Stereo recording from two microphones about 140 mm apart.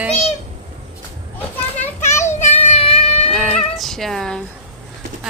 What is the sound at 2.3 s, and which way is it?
Child singing, 60° left (ahead or behind).